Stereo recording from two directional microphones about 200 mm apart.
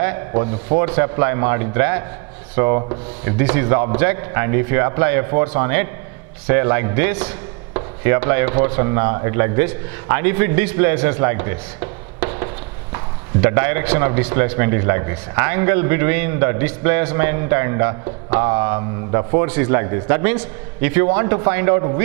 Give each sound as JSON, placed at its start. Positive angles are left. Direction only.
{"t": 0.7, "sound": "a man's voice", "side_deg": -10}